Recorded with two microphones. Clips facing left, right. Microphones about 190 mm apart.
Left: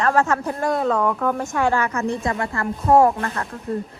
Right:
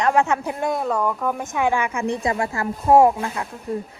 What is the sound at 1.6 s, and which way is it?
Speech, 10° right (ahead or behind).